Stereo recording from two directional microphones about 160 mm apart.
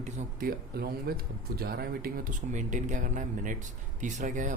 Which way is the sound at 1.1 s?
80° right.